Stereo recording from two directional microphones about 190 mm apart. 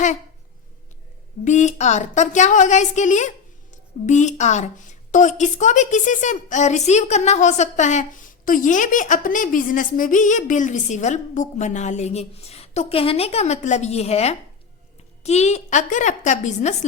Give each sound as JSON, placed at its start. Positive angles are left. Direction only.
{"t": 1.5, "sound": "a woman's voice", "side_deg": 40}